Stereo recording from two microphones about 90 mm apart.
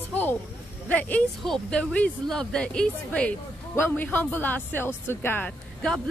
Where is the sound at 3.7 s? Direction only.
25° left (ahead or behind).